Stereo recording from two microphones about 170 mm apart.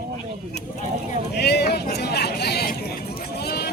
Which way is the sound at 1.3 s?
75° left (ahead or behind).